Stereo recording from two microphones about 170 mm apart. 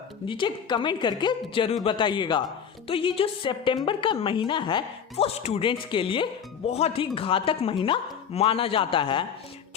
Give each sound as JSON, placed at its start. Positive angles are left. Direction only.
{"t": 0.3, "sound": "a woman's voice", "side_deg": 30}